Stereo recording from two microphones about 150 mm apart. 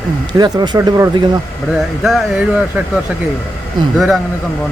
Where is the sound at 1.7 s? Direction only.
Centre (ahead or behind).